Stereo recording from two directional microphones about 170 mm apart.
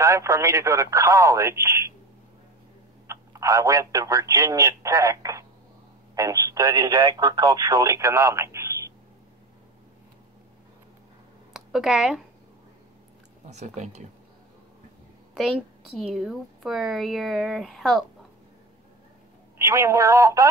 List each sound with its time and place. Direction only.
0.0 s speech: 20° right (ahead or behind)
3.1 s speech: 20° right (ahead or behind)
11.5 s speech: centre (ahead or behind)
13.5 s speech: 40° right (ahead or behind)
16.0 s speech: centre (ahead or behind)
19.6 s speech: 15° right (ahead or behind)